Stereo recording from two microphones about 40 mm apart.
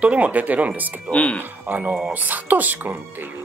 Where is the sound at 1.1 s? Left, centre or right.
Left.